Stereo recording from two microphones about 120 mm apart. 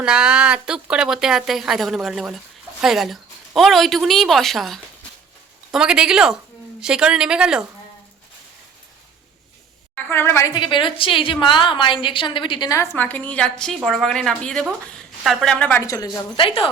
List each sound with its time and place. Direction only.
0.0 s a woman's voice: 10° right (ahead or behind)
9.9 s a woman's voice: 20° left (ahead or behind)
10.5 s a woman's voice: 40° left (ahead or behind)
12.7 s a woman's voice: 20° left (ahead or behind)
15.8 s a woman's voice: 30° left (ahead or behind)
16.4 s a woman's voice: 50° left (ahead or behind)